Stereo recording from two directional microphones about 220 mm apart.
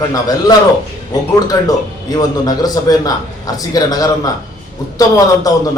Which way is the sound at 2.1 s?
15° left (ahead or behind).